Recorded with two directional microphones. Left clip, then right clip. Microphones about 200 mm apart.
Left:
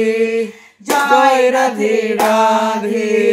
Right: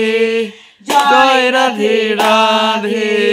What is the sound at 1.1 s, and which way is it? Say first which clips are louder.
Mantra: left 1 dB; 5° right (ahead or behind).